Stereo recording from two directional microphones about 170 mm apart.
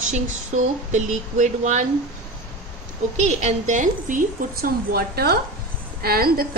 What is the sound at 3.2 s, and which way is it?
A woman's voice, 40° right (ahead or behind).